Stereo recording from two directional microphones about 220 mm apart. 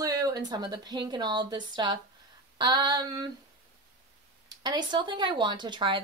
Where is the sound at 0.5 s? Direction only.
20° right (ahead or behind).